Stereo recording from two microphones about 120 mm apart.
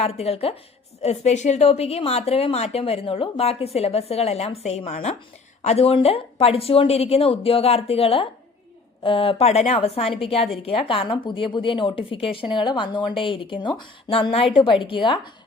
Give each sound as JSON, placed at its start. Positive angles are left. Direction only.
{"t": 0.0, "sound": "a woman's voice", "side_deg": 55}
{"t": 1.0, "sound": "a woman's voice", "side_deg": 70}